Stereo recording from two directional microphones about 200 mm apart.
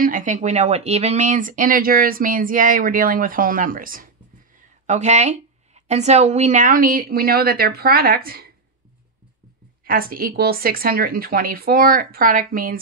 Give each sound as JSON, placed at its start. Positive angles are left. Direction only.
{"t": 0.0, "sound": "speech", "side_deg": -40}
{"t": 9.8, "sound": "speech", "side_deg": -45}